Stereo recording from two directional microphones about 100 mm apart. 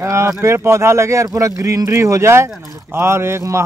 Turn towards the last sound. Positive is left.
turn(degrees=-25)  # may be behind; listen again after turning